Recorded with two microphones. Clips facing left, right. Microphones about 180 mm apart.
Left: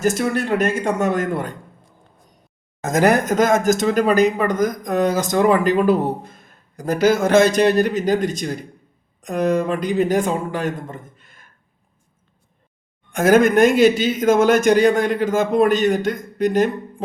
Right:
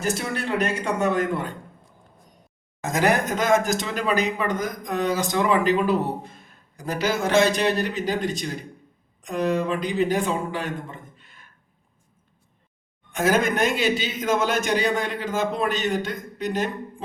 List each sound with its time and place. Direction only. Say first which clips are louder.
0.0 s speech: left 7 dB; 50° left (ahead or behind)
2.8 s speech: left 5 dB; 45° left (ahead or behind)
13.1 s speech: left 7 dB; 50° left (ahead or behind)